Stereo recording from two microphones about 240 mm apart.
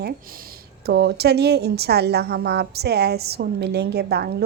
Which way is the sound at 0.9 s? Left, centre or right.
Right.